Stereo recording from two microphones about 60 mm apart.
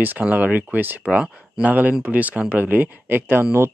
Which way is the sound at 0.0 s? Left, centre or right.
Right.